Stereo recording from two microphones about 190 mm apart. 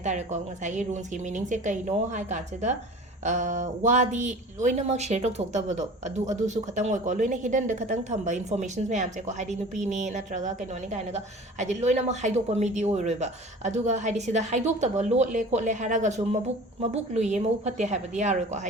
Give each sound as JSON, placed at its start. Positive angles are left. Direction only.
{"t": 0.0, "sound": "speech", "side_deg": -40}
{"t": 11.6, "sound": "speech", "side_deg": -35}